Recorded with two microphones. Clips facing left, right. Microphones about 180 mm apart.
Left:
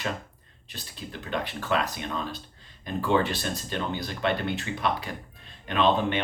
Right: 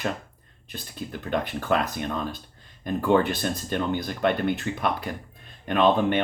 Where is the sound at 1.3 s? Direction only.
50° right (ahead or behind).